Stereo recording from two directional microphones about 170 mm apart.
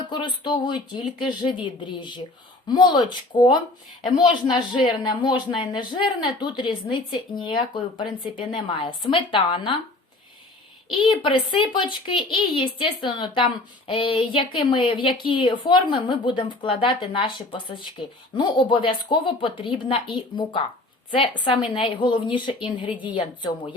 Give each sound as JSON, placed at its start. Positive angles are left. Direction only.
{"t": 0.1, "sound": "speech", "side_deg": 25}
{"t": 10.9, "sound": "a woman's voice", "side_deg": 30}